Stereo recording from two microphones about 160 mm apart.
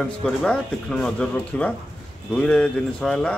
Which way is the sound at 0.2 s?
5° left (ahead or behind).